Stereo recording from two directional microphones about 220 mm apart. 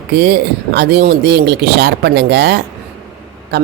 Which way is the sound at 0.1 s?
50° right (ahead or behind).